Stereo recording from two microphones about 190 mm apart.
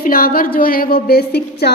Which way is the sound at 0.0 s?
50° left (ahead or behind).